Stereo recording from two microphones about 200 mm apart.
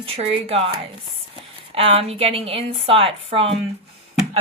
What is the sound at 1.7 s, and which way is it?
A woman's voice, 30° right (ahead or behind).